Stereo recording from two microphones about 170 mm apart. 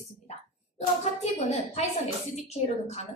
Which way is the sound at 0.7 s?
40° left (ahead or behind).